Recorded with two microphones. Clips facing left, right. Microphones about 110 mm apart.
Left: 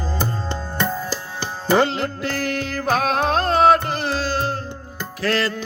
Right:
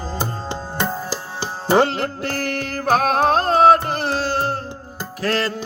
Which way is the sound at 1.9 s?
50° right (ahead or behind).